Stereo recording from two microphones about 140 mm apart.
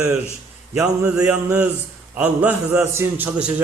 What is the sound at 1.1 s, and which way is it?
A man's voice, 10° right (ahead or behind).